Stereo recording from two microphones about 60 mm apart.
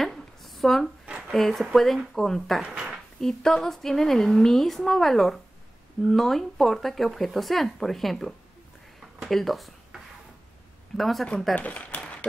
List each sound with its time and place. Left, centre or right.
0.0 s a sound: centre
1.3 s speech: centre
2.6 s speech: centre
3.2 s speech: centre
11.0 s speech: centre
11.5 s a sound: left